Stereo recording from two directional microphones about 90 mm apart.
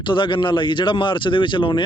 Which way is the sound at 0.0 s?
65° left (ahead or behind).